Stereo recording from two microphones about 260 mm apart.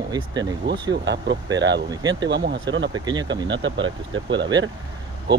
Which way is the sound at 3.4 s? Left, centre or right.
Right.